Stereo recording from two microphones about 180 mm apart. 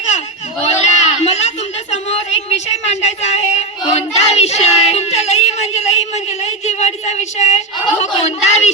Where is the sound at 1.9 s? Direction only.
35° left (ahead or behind).